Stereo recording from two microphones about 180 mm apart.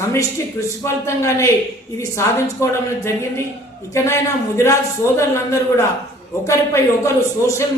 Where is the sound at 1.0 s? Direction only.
15° left (ahead or behind).